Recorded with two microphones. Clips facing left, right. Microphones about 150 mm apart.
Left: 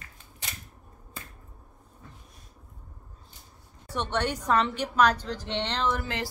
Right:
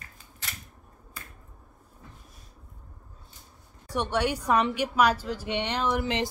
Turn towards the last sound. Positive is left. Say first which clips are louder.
# right 2 dB
turn(degrees=-20)  # may be behind; listen again after turning